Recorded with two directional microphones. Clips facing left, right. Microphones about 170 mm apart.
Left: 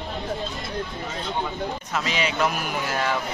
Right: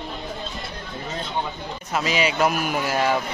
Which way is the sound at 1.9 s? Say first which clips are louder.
Right 6 dB; 10° right (ahead or behind).